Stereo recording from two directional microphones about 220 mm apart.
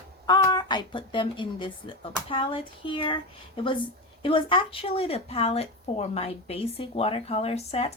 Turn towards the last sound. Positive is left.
turn(degrees=30)  # may be behind; listen again after turning